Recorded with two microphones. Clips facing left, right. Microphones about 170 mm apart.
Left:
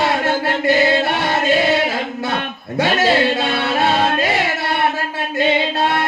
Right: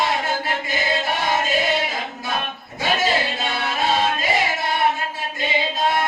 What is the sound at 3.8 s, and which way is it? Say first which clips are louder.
Music: left 3 dB; 65° left (ahead or behind).